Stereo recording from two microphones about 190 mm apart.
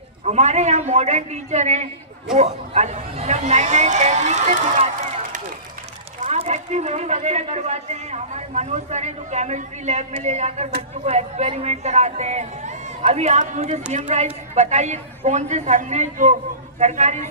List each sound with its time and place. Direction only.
0.3 s speech: 35° right (ahead or behind)